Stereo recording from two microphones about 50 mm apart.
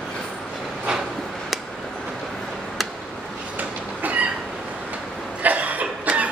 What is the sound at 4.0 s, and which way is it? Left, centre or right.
Train, right.